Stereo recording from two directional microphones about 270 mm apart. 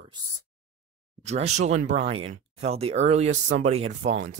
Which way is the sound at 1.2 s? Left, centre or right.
Right.